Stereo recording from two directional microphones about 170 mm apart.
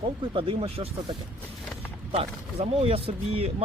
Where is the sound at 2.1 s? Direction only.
35° right (ahead or behind).